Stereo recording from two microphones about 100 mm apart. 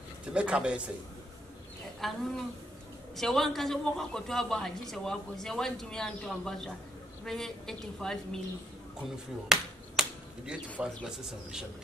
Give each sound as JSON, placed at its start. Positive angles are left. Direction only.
{"t": 0.3, "sound": "a man's voice", "side_deg": -10}
{"t": 2.0, "sound": "a woman's voice", "side_deg": 0}
{"t": 9.0, "sound": "a woman's voice", "side_deg": -5}